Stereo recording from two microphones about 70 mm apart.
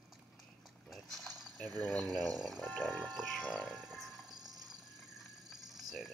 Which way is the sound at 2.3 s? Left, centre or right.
Centre.